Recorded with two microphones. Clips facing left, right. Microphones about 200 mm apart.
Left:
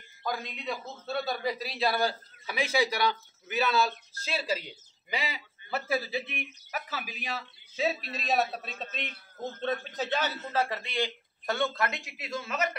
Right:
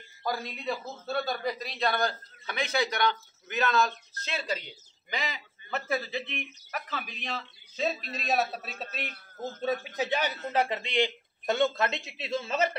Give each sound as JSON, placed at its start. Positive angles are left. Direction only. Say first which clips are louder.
{"t": 0.2, "sound": "a man's voice", "louder": "right 2 dB", "side_deg": -5}